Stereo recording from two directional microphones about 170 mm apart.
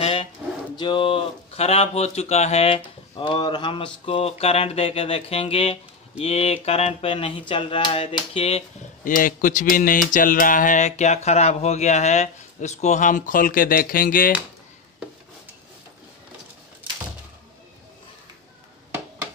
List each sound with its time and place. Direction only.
0.0 s a sound: 35° left (ahead or behind)
0.7 s speech: 30° left (ahead or behind)
9.0 s speech: 50° left (ahead or behind)